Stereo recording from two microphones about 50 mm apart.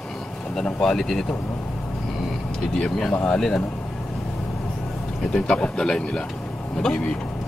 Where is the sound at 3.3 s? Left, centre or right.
Centre.